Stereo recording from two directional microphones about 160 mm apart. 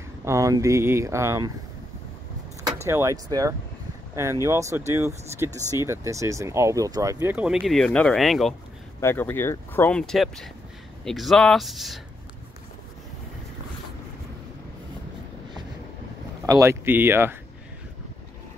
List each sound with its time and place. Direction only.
0.2 s speech: 20° right (ahead or behind)
2.6 s speech: 15° right (ahead or behind); by 8.5 s centre (ahead or behind)
9.0 s speech: 15° left (ahead or behind)
16.4 s speech: 20° right (ahead or behind)